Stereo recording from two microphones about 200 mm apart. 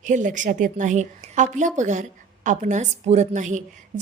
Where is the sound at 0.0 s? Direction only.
40° right (ahead or behind).